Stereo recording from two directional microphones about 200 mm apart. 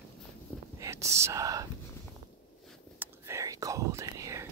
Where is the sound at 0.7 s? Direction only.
15° right (ahead or behind).